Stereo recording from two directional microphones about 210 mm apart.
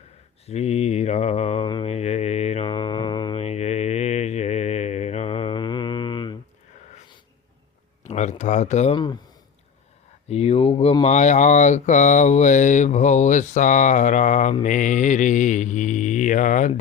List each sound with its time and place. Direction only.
0.4 s mantra: 30° left (ahead or behind)
8.0 s speech: 35° left (ahead or behind)
10.2 s speech: 30° left (ahead or behind)